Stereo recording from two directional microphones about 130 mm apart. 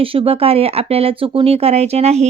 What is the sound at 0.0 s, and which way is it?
Speech, 45° right (ahead or behind).